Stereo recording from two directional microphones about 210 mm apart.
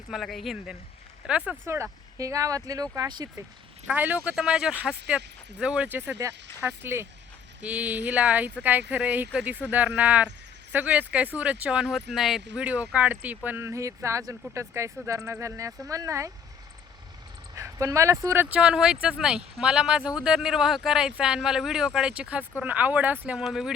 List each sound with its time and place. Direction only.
0.1 s speech: centre (ahead or behind); by 3.4 s 20° right (ahead or behind)
3.8 s speech: 10° right (ahead or behind)
17.5 s speech: 15° right (ahead or behind)